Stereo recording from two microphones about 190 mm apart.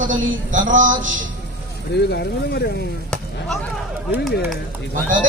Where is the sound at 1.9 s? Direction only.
60° left (ahead or behind).